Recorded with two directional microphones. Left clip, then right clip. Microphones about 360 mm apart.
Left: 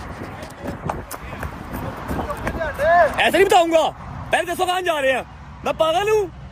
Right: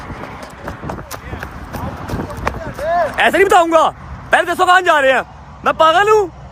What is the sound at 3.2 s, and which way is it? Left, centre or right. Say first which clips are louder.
A man's voice: right 4 dB; centre.